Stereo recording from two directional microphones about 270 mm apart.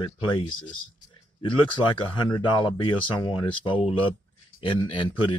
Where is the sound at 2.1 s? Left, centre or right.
Centre.